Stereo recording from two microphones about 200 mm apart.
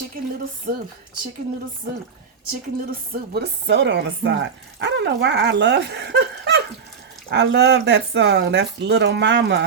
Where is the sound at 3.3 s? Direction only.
55° right (ahead or behind).